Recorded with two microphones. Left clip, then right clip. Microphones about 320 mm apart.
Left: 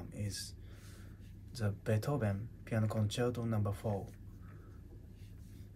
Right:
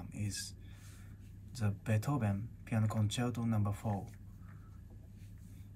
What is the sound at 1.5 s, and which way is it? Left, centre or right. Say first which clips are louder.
Speech: left 2 dB; centre.